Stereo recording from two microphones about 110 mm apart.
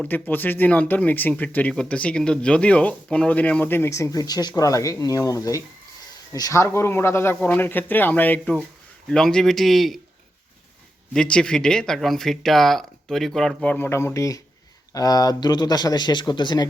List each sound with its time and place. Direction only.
0.1 s speech: 15° left (ahead or behind); by 10.0 s centre (ahead or behind)
11.1 s speech: 5° left (ahead or behind); by 16.6 s 45° left (ahead or behind)